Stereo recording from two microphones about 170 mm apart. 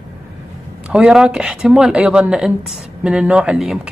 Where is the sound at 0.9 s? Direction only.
5° right (ahead or behind).